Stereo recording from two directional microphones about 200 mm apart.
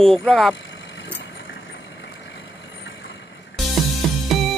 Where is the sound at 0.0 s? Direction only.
Centre (ahead or behind).